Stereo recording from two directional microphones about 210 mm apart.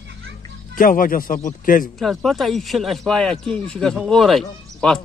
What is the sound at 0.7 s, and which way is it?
Speech, 40° left (ahead or behind).